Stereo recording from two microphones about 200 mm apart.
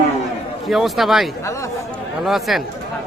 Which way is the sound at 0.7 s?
Centre (ahead or behind).